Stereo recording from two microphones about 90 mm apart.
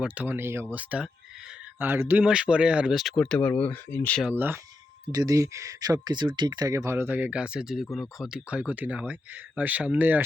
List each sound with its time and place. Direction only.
0.0 s speech: 20° right (ahead or behind)
0.8 s speech: 15° right (ahead or behind)
2.2 s speech: 10° right (ahead or behind)
3.2 s speech: 10° left (ahead or behind)
4.3 s speech: 25° right (ahead or behind)
5.1 s speech: 40° right (ahead or behind); by 10.2 s 20° right (ahead or behind)